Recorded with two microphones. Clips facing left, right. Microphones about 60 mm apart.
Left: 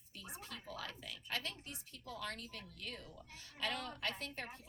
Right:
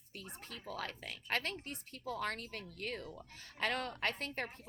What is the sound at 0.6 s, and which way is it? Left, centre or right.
A woman's voice, right.